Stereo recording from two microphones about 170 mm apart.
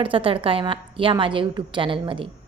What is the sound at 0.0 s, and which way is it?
A woman's voice, 30° right (ahead or behind).